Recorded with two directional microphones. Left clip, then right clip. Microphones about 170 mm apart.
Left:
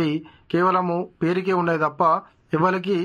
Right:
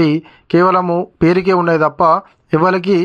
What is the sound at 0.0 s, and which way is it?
A woman's voice, 30° right (ahead or behind).